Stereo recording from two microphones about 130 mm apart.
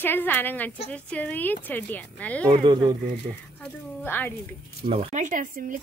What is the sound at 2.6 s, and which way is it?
Speech, 35° right (ahead or behind).